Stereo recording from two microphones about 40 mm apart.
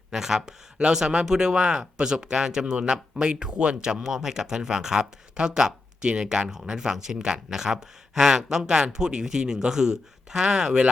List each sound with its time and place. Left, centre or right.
0.1 s speech: centre
4.0 s speech: centre